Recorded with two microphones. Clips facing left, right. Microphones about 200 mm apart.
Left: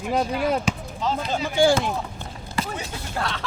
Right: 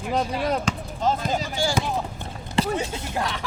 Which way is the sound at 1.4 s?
55° left (ahead or behind).